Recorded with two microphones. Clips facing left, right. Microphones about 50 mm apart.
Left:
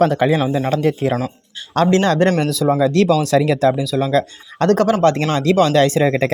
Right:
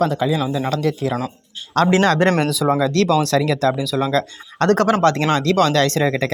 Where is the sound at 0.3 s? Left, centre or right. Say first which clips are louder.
Left 3 dB; left.